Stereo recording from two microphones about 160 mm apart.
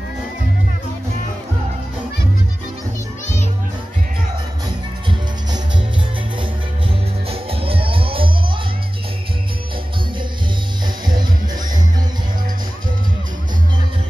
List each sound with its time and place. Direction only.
7.2 s music: 35° right (ahead or behind)